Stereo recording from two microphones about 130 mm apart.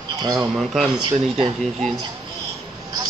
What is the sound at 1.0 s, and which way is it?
Speech, 40° right (ahead or behind).